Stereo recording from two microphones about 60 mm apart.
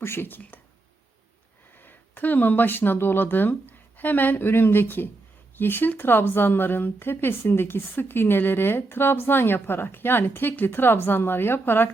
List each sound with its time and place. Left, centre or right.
0.0 s speech: left
1.7 s speech: left